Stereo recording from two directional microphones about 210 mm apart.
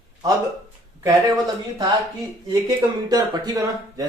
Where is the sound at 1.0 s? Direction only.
15° right (ahead or behind).